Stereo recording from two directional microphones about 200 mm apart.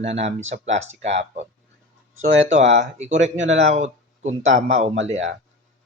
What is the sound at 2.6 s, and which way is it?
Speech, 35° right (ahead or behind).